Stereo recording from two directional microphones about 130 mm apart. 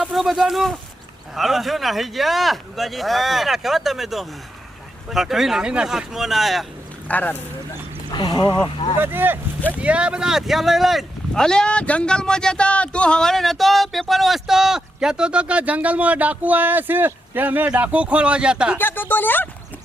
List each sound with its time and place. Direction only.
0.0 s speech: centre (ahead or behind)
7.1 s speech: 10° left (ahead or behind)
8.1 s speech: 35° left (ahead or behind)
9.0 s speech: 15° right (ahead or behind)
18.8 s speech: 15° left (ahead or behind)